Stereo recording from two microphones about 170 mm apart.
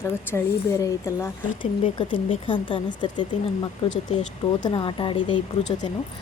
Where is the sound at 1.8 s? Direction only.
30° left (ahead or behind).